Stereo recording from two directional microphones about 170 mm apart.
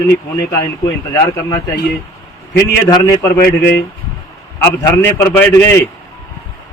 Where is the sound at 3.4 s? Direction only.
65° left (ahead or behind).